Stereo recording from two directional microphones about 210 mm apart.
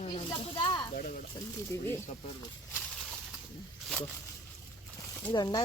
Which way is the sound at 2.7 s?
5° left (ahead or behind).